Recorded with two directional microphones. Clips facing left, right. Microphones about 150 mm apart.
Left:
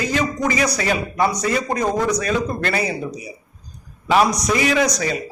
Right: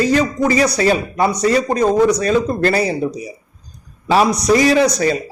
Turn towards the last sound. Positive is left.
turn(degrees=-30)  # may be behind; listen again after turning